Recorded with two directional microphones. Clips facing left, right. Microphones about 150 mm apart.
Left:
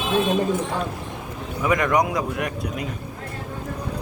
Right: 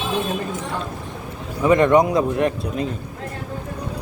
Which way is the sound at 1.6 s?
25° right (ahead or behind).